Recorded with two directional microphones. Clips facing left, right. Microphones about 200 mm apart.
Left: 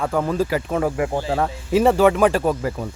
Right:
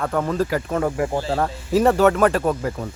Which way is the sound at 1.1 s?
15° left (ahead or behind).